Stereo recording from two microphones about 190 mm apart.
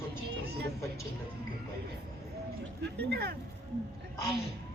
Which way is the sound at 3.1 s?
60° right (ahead or behind).